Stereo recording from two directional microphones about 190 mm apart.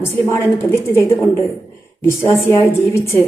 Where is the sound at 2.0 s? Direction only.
15° left (ahead or behind).